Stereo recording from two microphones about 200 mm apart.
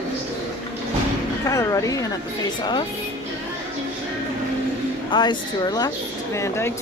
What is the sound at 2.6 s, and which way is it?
Speech, 20° left (ahead or behind).